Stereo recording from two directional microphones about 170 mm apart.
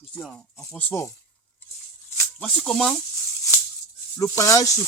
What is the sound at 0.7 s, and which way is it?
Speech, 10° left (ahead or behind).